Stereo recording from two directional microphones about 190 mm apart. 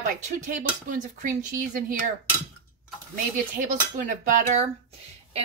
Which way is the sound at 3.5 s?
40° right (ahead or behind).